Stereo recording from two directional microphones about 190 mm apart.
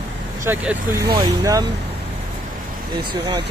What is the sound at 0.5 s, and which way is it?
Speech, 15° right (ahead or behind).